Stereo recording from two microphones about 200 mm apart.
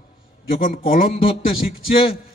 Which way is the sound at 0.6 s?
45° left (ahead or behind).